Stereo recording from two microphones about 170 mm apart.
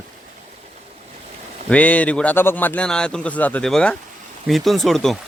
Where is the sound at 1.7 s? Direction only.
10° left (ahead or behind).